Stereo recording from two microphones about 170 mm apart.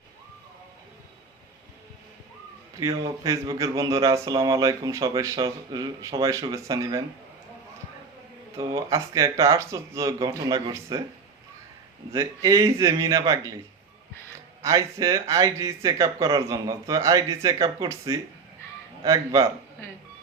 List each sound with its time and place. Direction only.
2.8 s speech: 20° right (ahead or behind)
8.5 s speech: 20° right (ahead or behind)
12.1 s speech: 20° right (ahead or behind)
14.6 s speech: 20° right (ahead or behind)